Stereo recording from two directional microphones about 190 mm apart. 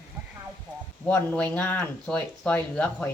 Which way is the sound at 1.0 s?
10° left (ahead or behind).